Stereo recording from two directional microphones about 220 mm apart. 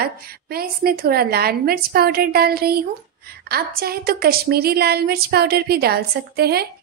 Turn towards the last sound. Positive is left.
turn(degrees=-45)  # may be behind; listen again after turning